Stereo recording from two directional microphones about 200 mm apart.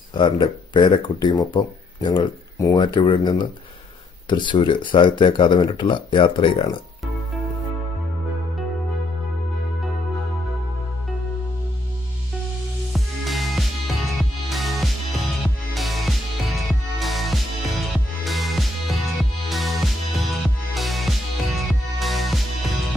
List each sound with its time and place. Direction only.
0.1 s speech: 25° left (ahead or behind)
12.9 s music: centre (ahead or behind)